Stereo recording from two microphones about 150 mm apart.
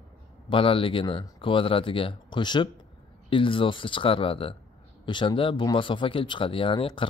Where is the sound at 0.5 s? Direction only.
35° left (ahead or behind).